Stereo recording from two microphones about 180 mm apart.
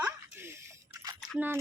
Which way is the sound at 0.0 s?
10° right (ahead or behind).